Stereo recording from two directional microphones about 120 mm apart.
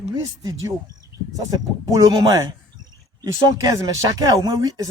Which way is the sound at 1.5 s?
30° right (ahead or behind).